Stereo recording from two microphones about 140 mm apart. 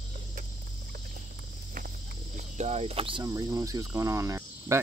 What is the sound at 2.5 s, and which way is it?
Speech, 50° right (ahead or behind).